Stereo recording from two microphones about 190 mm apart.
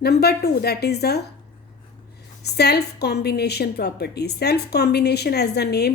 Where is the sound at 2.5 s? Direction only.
60° left (ahead or behind).